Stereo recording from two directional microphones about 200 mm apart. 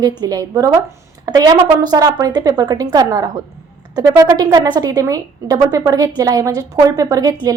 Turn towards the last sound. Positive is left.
turn(degrees=-15)  # may be behind; listen again after turning